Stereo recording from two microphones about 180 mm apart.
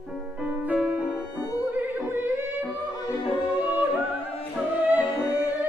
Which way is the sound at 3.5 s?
30° left (ahead or behind).